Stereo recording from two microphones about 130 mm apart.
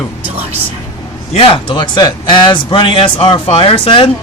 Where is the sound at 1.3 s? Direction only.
45° left (ahead or behind).